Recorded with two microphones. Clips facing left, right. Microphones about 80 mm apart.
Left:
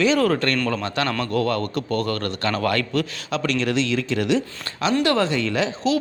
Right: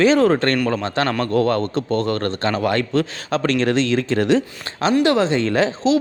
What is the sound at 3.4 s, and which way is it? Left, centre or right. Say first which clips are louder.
Speech: right 4 dB; right.